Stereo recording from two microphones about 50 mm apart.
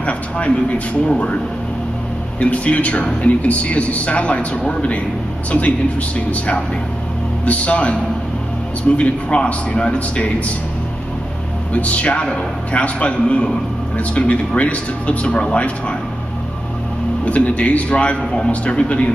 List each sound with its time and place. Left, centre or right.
0.0 s a man's voice: left
2.4 s a man's voice: left
11.7 s a man's voice: left
17.2 s a man's voice: left